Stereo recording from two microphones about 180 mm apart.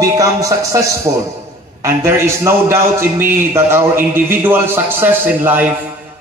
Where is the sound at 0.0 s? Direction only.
20° right (ahead or behind).